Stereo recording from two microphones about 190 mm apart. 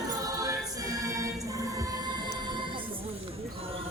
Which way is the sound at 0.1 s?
20° right (ahead or behind).